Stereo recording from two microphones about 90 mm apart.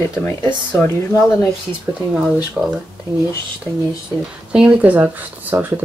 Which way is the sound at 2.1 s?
5° right (ahead or behind).